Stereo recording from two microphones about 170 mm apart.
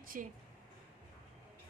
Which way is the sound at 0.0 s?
55° right (ahead or behind).